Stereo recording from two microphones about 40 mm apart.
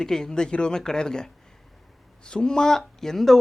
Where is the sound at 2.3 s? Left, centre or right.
Centre.